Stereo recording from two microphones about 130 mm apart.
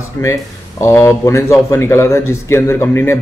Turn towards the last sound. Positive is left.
turn(degrees=20)  # may be behind; listen again after turning